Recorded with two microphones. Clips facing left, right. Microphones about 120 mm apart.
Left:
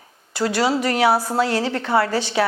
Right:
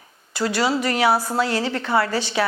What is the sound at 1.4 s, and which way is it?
A woman's voice, 50° left (ahead or behind).